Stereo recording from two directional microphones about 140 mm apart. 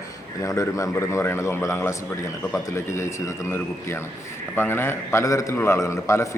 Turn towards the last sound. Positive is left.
turn(degrees=20)  # may be behind; listen again after turning